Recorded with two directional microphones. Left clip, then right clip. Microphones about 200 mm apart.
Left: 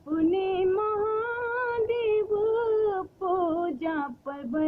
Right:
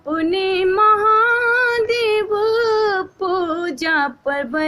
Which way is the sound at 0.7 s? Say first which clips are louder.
Right 14 dB; 45° right (ahead or behind).